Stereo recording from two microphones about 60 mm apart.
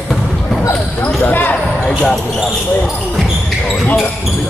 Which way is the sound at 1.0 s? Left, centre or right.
Left.